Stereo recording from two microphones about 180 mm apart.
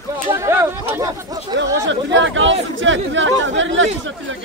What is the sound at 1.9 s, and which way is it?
Speech, 90° right.